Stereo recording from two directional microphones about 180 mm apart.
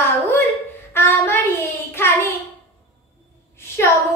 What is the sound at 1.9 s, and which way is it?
Child singing, 15° left (ahead or behind).